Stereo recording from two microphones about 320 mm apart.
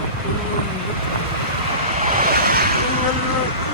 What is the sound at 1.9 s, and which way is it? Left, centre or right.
Waves, right.